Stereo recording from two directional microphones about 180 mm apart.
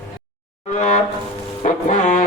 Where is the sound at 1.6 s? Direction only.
45° left (ahead or behind).